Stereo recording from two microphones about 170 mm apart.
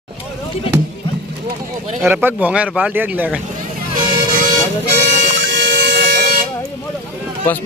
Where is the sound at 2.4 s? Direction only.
5° right (ahead or behind).